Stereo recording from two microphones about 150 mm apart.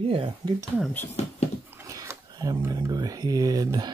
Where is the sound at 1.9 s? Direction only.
25° right (ahead or behind).